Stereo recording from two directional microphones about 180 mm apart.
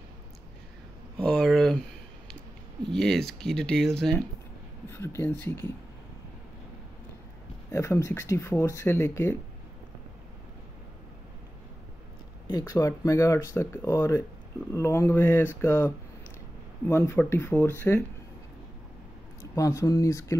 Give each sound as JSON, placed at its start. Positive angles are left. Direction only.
{"t": 1.1, "sound": "a sound", "side_deg": 0}
{"t": 2.8, "sound": "speech", "side_deg": 5}
{"t": 4.8, "sound": "speech", "side_deg": 15}
{"t": 7.7, "sound": "speech", "side_deg": 15}
{"t": 12.4, "sound": "speech", "side_deg": 20}
{"t": 19.5, "sound": "speech", "side_deg": 20}